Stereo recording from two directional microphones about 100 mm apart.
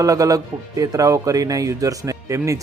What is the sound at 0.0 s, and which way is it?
Speech, 35° right (ahead or behind).